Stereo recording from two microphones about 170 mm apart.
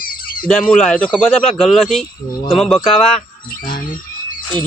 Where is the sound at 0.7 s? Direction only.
5° left (ahead or behind).